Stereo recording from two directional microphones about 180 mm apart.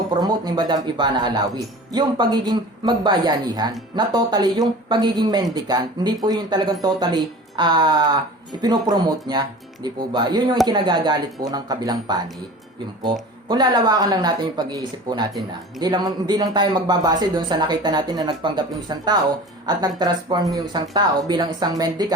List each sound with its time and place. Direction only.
0.1 s speech: 25° right (ahead or behind)
13.5 s speech: 25° right (ahead or behind)